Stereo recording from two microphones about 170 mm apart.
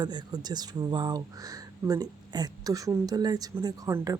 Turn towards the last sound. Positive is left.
turn(degrees=-20)  # may be behind; listen again after turning